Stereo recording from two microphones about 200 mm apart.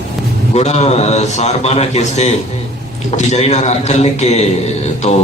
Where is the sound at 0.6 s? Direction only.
35° left (ahead or behind).